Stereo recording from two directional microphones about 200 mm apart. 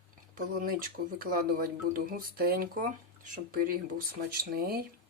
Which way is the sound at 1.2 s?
45° right (ahead or behind).